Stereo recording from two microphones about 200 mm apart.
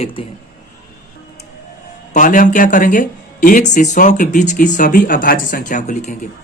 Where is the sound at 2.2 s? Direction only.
40° left (ahead or behind).